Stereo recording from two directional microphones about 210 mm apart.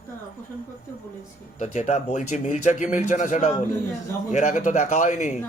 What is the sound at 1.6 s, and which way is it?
Speech, 35° left (ahead or behind).